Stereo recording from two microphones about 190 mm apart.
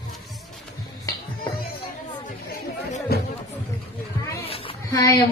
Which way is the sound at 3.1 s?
55° left (ahead or behind).